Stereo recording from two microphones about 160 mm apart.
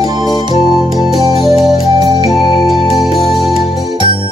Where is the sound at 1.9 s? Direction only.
25° right (ahead or behind).